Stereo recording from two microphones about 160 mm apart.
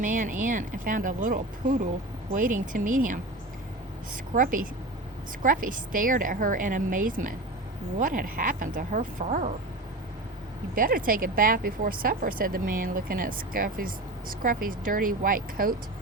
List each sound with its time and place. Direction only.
0.0 s speech: 55° right (ahead or behind)
4.4 s speech: 60° right (ahead or behind)
10.8 s speech: 60° right (ahead or behind)